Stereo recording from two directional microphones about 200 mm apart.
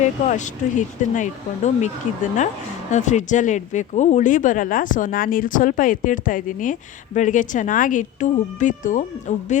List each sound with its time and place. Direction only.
0.3 s speech: 40° left (ahead or behind)
2.9 s speech: 35° left (ahead or behind)